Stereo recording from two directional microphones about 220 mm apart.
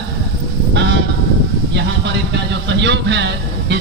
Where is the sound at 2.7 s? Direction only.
55° right (ahead or behind).